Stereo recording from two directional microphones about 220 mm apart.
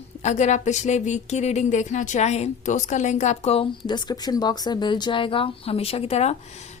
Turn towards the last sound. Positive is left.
turn(degrees=30)  # may be behind; listen again after turning